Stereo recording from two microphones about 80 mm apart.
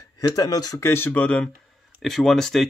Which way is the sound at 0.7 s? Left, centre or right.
Left.